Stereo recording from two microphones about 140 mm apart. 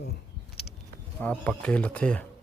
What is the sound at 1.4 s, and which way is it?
Speech, 10° left (ahead or behind).